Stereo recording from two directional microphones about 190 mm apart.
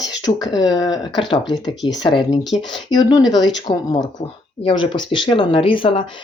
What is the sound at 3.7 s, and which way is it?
Speech, 25° left (ahead or behind).